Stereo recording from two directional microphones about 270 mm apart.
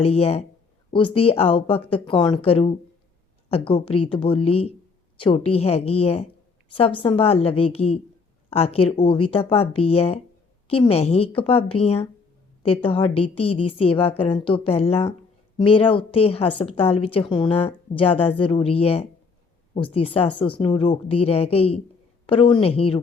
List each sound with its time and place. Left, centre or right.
0.0 s a woman's voice: left